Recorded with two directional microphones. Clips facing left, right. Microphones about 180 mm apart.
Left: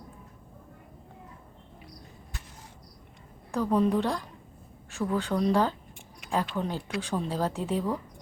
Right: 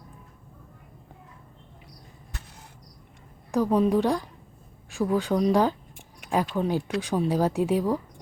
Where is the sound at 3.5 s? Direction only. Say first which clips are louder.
Right 3 dB; 10° right (ahead or behind).